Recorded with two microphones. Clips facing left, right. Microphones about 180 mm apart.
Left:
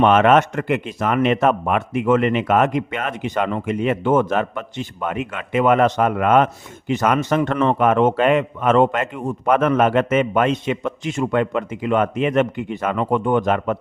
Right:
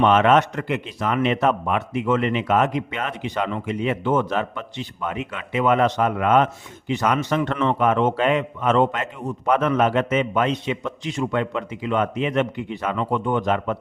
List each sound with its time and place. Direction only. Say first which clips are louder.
0.0 s a man's voice: left 3 dB; 55° left (ahead or behind)